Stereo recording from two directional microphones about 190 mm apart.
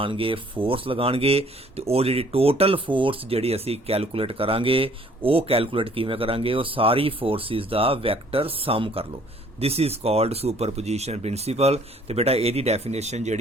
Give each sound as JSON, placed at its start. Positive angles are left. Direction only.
{"t": 0.0, "sound": "speech", "side_deg": -25}